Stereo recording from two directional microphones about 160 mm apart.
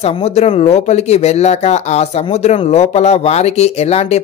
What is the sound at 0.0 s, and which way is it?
Speech, 40° left (ahead or behind).